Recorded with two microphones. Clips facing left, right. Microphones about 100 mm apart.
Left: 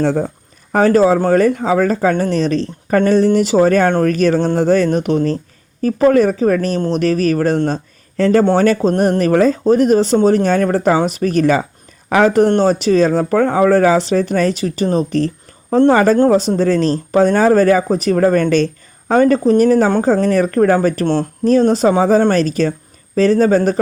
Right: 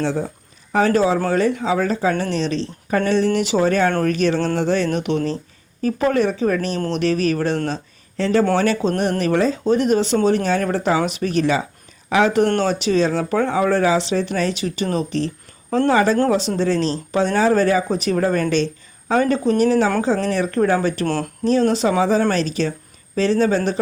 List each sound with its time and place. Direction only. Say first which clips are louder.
0.0 s speech: left 6 dB; 50° left (ahead or behind)
6.7 s speech: left 5 dB; 30° left (ahead or behind)
7.0 s speech: left 4 dB; 40° left (ahead or behind)